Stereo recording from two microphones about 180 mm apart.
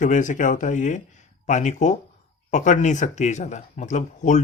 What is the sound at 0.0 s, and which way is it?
Speech, 45° left (ahead or behind).